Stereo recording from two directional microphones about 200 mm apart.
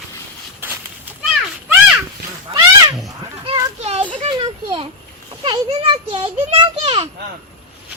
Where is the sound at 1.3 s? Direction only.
5° right (ahead or behind).